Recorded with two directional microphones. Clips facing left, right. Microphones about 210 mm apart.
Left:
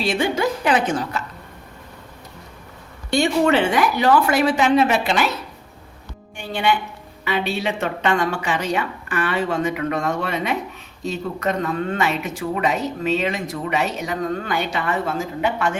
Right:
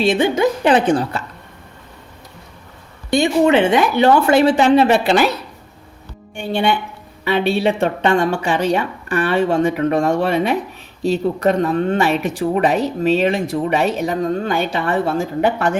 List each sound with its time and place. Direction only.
0.0 s speech: 20° right (ahead or behind)
3.1 s speech: 20° right (ahead or behind)
7.6 s speech: 30° right (ahead or behind)